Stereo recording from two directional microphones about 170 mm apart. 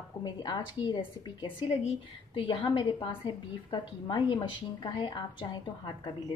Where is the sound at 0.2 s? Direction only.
25° left (ahead or behind).